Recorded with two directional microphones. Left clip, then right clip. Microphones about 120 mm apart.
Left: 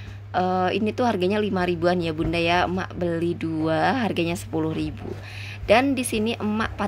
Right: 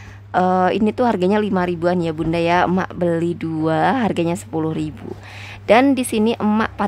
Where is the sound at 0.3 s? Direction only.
40° right (ahead or behind).